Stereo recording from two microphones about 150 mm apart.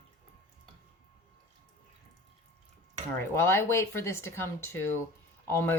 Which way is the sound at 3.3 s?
15° left (ahead or behind).